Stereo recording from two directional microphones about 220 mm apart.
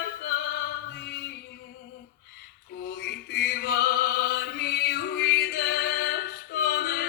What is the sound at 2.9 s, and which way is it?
Music, 45° left (ahead or behind).